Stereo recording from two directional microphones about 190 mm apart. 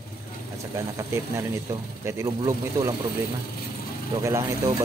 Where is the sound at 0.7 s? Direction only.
15° right (ahead or behind).